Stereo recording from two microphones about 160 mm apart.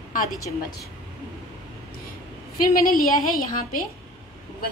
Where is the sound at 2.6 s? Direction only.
65° left (ahead or behind).